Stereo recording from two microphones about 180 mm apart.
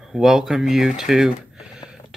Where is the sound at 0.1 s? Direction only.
Centre (ahead or behind).